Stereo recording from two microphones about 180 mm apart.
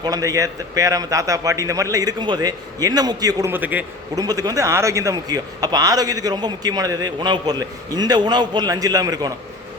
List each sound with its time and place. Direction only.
0.0 s a man's voice: 20° right (ahead or behind)